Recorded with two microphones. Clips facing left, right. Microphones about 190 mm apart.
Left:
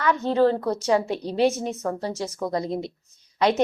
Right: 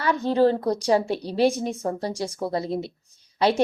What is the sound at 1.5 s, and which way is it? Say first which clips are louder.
Speech: right 1 dB; 10° right (ahead or behind).